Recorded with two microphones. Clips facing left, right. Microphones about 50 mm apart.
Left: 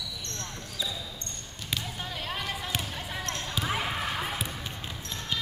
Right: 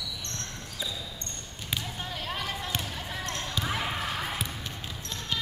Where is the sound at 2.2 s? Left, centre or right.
Centre.